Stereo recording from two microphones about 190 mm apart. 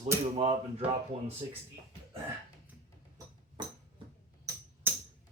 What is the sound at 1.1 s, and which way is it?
Speech, 30° right (ahead or behind).